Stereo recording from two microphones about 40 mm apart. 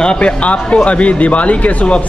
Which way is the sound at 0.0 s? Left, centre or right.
Left.